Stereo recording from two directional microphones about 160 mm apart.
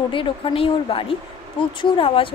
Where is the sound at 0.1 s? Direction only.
35° left (ahead or behind).